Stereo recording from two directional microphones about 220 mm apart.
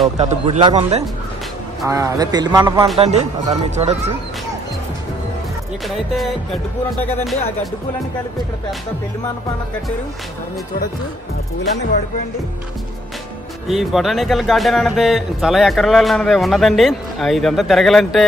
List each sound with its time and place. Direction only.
0.0 s speech: 30° right (ahead or behind)
1.9 s a man's voice: 15° right (ahead or behind)
3.0 s speech: 30° right (ahead or behind)
5.9 s a man's voice: centre (ahead or behind)
13.7 s a man's voice: centre (ahead or behind)